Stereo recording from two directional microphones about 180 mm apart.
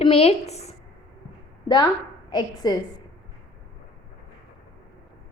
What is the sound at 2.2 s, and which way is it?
Speech, 20° left (ahead or behind).